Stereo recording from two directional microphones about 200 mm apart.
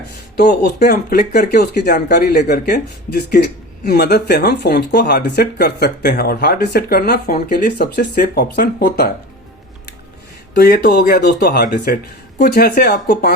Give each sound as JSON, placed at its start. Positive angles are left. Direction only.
{"t": 0.3, "sound": "speech", "side_deg": 55}
{"t": 10.5, "sound": "speech", "side_deg": 55}